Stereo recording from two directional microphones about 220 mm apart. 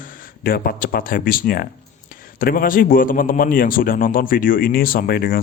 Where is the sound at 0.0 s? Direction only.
40° left (ahead or behind).